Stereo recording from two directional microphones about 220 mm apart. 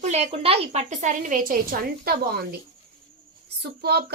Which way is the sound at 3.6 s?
45° right (ahead or behind).